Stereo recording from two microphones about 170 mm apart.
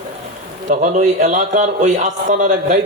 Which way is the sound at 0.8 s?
50° right (ahead or behind).